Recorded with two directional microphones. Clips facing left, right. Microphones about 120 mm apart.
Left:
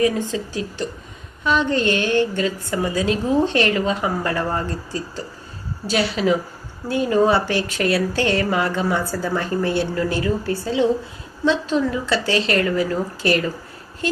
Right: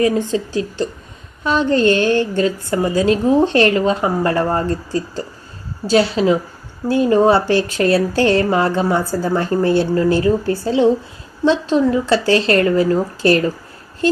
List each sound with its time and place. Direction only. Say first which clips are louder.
0.0 s speech: right 4 dB; 35° right (ahead or behind)